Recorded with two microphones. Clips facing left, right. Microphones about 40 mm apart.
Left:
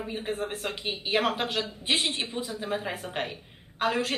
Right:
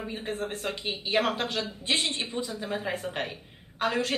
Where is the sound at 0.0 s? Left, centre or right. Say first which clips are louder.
Left 1 dB; centre.